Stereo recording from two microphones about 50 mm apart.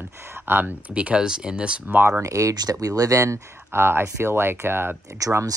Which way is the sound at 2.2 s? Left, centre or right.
Right.